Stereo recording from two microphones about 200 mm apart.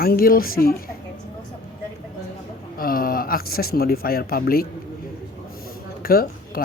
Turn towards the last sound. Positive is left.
turn(degrees=50)  # may be behind; listen again after turning